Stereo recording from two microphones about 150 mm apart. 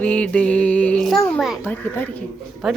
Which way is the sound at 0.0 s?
10° left (ahead or behind).